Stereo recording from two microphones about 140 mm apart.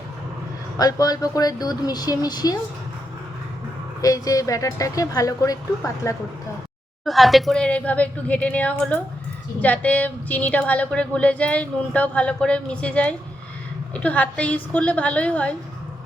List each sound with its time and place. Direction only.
0.8 s a woman's voice: 25° left (ahead or behind)
4.0 s a woman's voice: 25° left (ahead or behind)
7.0 s a woman's voice: centre (ahead or behind)